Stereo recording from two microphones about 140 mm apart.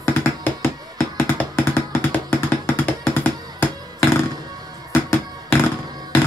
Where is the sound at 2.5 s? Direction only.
10° left (ahead or behind).